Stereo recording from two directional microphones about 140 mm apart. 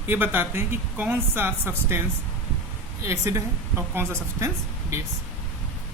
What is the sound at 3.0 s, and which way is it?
Speech, 20° right (ahead or behind).